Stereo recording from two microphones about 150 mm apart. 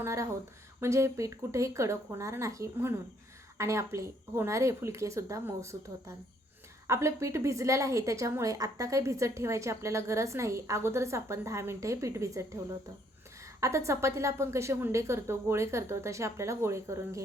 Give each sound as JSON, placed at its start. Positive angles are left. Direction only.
{"t": 0.0, "sound": "a woman's voice", "side_deg": -20}